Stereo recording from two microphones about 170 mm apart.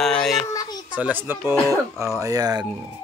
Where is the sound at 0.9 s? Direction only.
10° right (ahead or behind).